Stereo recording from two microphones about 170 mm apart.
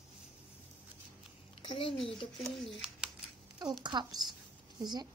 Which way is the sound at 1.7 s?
30° left (ahead or behind).